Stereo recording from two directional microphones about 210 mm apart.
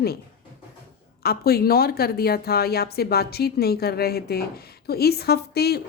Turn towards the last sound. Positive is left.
turn(degrees=50)  # may be behind; listen again after turning